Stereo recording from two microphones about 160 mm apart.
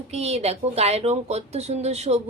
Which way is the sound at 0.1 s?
40° right (ahead or behind).